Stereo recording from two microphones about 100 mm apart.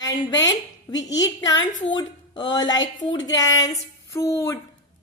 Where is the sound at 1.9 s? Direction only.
50° left (ahead or behind).